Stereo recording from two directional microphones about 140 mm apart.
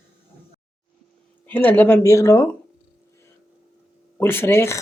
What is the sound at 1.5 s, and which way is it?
Speech, 15° left (ahead or behind).